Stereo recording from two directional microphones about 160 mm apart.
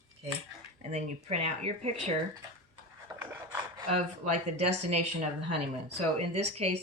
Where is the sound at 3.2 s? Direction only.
15° right (ahead or behind).